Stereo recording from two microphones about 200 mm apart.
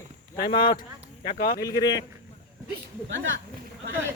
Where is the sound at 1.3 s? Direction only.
45° left (ahead or behind).